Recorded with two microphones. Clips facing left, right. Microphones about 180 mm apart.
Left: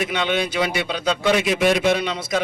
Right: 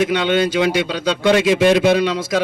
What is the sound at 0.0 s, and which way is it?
A man's voice, 90° right.